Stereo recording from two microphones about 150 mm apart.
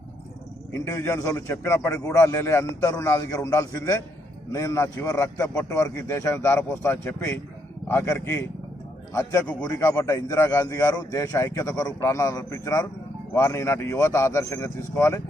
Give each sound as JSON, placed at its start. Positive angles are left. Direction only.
{"t": 0.7, "sound": "a man's voice", "side_deg": 20}